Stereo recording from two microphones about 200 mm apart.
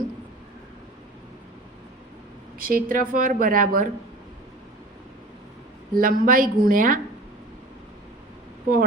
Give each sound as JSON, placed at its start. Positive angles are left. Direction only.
{"t": 2.6, "sound": "speech", "side_deg": -45}
{"t": 5.9, "sound": "speech", "side_deg": -45}